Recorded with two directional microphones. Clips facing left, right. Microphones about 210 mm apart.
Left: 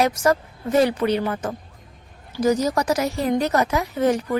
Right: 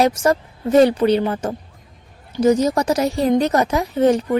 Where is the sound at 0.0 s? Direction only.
30° right (ahead or behind).